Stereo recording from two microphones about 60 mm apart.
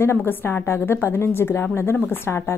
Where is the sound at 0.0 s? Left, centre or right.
Left.